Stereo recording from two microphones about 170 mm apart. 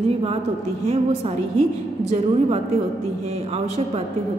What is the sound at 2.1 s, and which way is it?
Speech, 40° right (ahead or behind).